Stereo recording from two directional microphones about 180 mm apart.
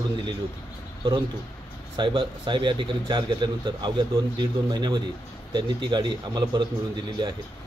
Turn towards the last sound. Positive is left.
turn(degrees=-25)  # may be behind; listen again after turning